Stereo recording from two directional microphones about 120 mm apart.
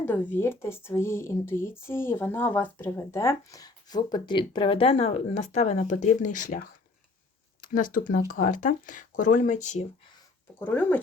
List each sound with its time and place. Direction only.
0.0 s speech: 15° left (ahead or behind); by 6.6 s 90° left
7.6 s speech: 90° left
10.6 s speech: 15° left (ahead or behind)